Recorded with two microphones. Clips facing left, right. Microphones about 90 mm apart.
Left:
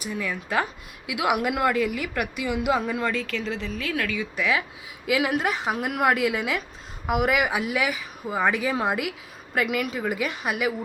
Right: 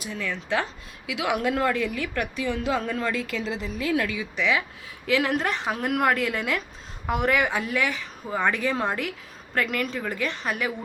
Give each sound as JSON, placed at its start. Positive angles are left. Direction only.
{"t": 0.1, "sound": "a woman's voice", "side_deg": 10}
{"t": 3.9, "sound": "speech", "side_deg": -20}
{"t": 4.4, "sound": "a woman's voice", "side_deg": 5}